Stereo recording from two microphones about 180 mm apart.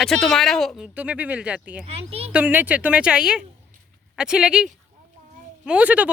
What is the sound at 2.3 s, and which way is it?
A woman's voice, 10° right (ahead or behind).